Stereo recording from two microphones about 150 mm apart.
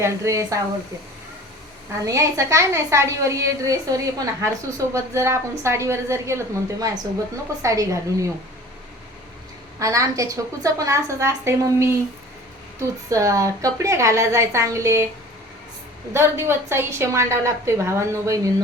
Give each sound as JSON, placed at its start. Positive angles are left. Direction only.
{"t": 0.0, "sound": "a woman's voice", "side_deg": -20}
{"t": 2.0, "sound": "a woman's voice", "side_deg": -20}
{"t": 9.7, "sound": "a woman's voice", "side_deg": -20}
{"t": 13.1, "sound": "a woman's voice", "side_deg": -20}
{"t": 16.1, "sound": "a woman's voice", "side_deg": -15}